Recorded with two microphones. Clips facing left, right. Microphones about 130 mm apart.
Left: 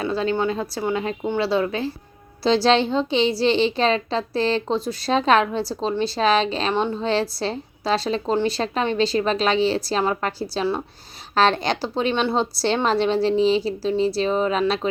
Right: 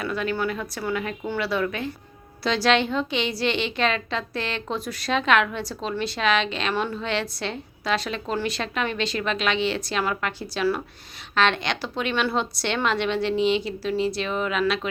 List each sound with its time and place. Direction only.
0.0 s a woman's voice: 30° left (ahead or behind)